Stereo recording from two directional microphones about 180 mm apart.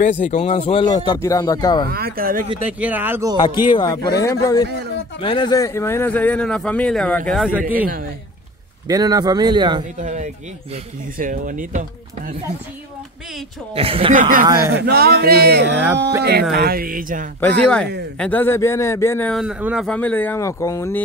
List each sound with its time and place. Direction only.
0.3 s speech: 35° left (ahead or behind)
1.9 s speech: 60° right (ahead or behind)
2.6 s speech: 10° right (ahead or behind)
3.4 s speech: 25° left (ahead or behind); by 7.4 s 5° left (ahead or behind)
7.8 s speech: 55° right (ahead or behind)
8.8 s a man's voice: 20° right (ahead or behind)
9.9 s speech: 40° right (ahead or behind)
13.7 s speech: 30° right (ahead or behind)
14.1 s speech: 45° right (ahead or behind)
14.6 s speech: 60° right (ahead or behind)
17.4 s speech: 5° left (ahead or behind)
19.6 s speech: 5° right (ahead or behind)
19.9 s speech: 10° left (ahead or behind)